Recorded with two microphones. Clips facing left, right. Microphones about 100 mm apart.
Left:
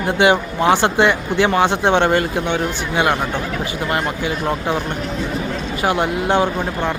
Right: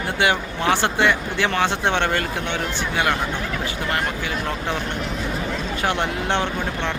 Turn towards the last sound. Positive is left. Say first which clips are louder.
# left 5 dB
turn(degrees=10)  # may be behind; listen again after turning